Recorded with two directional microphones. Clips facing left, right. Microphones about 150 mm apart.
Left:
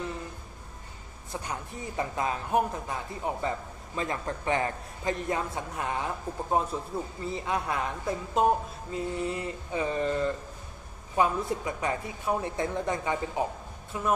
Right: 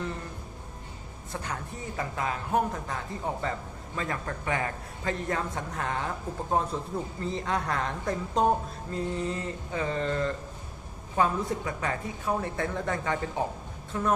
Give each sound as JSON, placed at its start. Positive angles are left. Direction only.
{"t": 1.3, "sound": "a woman's voice", "side_deg": 15}
{"t": 5.3, "sound": "a woman's voice", "side_deg": 15}